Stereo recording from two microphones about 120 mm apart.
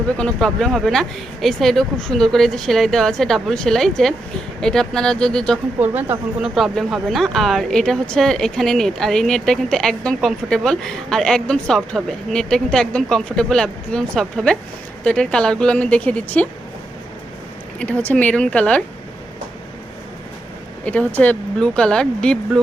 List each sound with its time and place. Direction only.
0.2 s speech: 5° left (ahead or behind)
5.8 s speech: 15° right (ahead or behind)
6.4 s speech: centre (ahead or behind)
17.7 s speech: 10° left (ahead or behind)
20.8 s speech: 10° left (ahead or behind)